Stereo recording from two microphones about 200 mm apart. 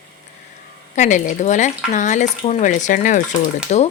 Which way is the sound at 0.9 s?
35° left (ahead or behind).